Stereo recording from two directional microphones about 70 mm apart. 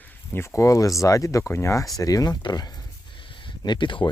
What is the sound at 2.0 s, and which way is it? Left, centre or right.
Speech, left.